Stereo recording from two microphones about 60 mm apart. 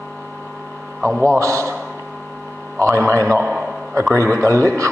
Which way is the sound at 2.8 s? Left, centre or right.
Right.